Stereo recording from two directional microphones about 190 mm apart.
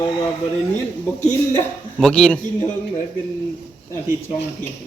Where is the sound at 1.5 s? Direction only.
5° left (ahead or behind).